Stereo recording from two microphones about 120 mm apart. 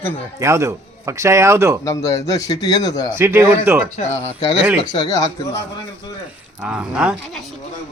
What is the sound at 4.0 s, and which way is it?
Speech, 75° left (ahead or behind).